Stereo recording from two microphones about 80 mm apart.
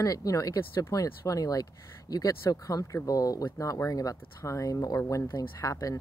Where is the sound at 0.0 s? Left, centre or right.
Left.